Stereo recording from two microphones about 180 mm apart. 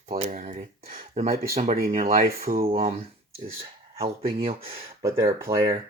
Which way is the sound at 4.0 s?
35° right (ahead or behind).